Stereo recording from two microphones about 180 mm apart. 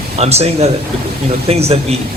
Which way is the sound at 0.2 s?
35° right (ahead or behind).